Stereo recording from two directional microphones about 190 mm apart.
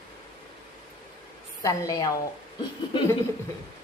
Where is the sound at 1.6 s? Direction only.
20° left (ahead or behind).